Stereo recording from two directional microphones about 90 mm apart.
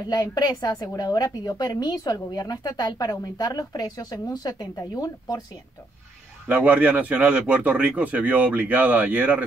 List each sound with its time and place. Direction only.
0.1 s speech: 50° left (ahead or behind)
6.5 s a man's voice: 15° right (ahead or behind)